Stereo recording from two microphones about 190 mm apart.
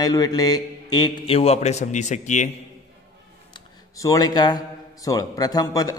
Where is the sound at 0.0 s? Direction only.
20° left (ahead or behind); by 2.5 s 40° left (ahead or behind).